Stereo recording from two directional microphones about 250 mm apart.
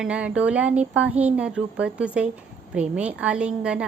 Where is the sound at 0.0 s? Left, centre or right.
Centre.